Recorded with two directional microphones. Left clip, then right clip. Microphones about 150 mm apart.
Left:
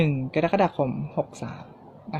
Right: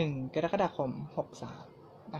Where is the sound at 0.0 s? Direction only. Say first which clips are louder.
Left 8 dB; 40° left (ahead or behind).